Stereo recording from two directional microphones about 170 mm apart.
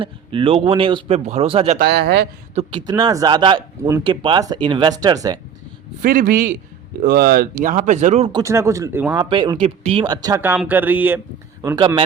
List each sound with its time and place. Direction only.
0.0 s speech: 30° right (ahead or behind)
1.8 s a man's voice: 75° right (ahead or behind)
2.6 s speech: 25° right (ahead or behind)
6.0 s a man's voice: 55° right (ahead or behind)
8.3 s speech: 20° right (ahead or behind)
9.1 s speech: 25° right (ahead or behind); by 11.2 s 10° right (ahead or behind)